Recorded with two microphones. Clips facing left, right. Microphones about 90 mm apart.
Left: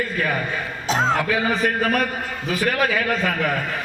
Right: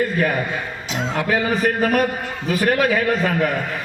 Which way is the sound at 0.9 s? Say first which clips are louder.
Left 5 dB; 35° left (ahead or behind).